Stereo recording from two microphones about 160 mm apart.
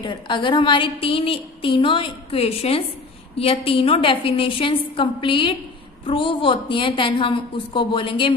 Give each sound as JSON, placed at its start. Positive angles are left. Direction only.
{"t": 0.0, "sound": "a woman's voice", "side_deg": 30}